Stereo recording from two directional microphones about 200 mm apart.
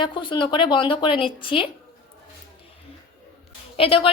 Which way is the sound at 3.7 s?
30° left (ahead or behind).